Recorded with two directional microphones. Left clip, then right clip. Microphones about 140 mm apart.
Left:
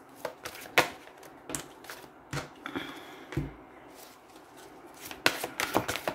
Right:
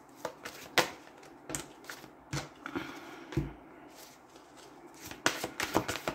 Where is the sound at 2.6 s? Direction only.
5° right (ahead or behind).